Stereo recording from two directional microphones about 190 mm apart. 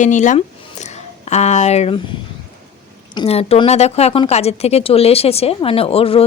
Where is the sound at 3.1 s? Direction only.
30° left (ahead or behind).